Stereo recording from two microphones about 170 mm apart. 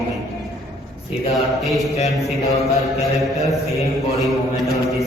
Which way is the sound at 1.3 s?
Centre (ahead or behind).